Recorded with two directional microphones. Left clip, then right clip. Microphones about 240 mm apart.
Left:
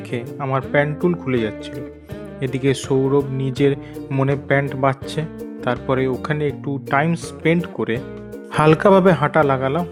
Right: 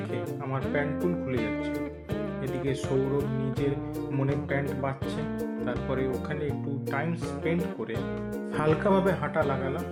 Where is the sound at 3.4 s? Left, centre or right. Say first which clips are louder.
Left 11 dB; left.